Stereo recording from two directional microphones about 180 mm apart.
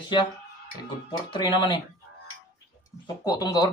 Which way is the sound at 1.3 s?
25° left (ahead or behind).